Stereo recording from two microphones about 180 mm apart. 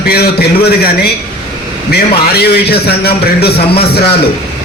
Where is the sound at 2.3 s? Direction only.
60° left (ahead or behind).